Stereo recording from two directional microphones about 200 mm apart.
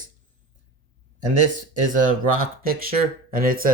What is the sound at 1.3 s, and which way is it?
Speech, 40° right (ahead or behind).